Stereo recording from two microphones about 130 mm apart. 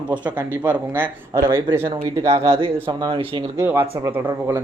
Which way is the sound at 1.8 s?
50° right (ahead or behind).